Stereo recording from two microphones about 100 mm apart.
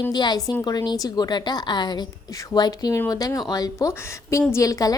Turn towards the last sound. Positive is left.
turn(degrees=35)  # may be behind; listen again after turning